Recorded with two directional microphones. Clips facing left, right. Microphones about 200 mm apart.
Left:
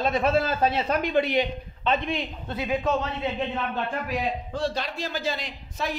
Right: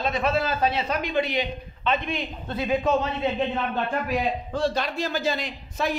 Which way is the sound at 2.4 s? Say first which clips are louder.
Right 2 dB; 10° left (ahead or behind).